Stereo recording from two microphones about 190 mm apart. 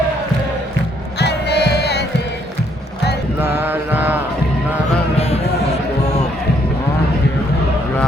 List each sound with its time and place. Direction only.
1.2 s music: 60° left (ahead or behind)
3.4 s mantra: 10° right (ahead or behind)